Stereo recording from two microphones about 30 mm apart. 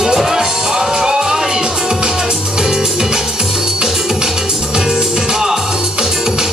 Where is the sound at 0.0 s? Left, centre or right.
Centre.